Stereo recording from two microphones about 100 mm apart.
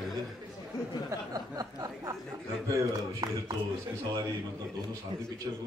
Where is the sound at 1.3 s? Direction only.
35° right (ahead or behind).